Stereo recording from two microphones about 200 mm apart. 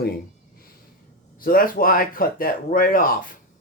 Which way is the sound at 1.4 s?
45° left (ahead or behind).